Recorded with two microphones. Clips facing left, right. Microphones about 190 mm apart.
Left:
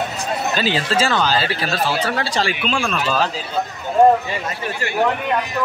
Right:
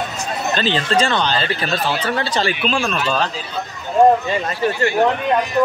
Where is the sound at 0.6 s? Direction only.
10° left (ahead or behind).